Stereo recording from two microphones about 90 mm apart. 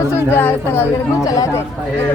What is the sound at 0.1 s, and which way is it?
Speech, 25° left (ahead or behind).